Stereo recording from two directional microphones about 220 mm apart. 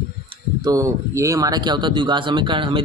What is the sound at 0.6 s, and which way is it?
Speech, 15° right (ahead or behind).